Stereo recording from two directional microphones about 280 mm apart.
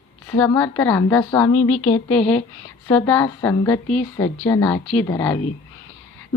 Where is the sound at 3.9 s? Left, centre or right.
Left.